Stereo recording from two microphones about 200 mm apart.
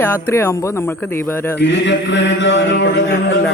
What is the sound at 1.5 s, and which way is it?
A man's voice, 60° left (ahead or behind).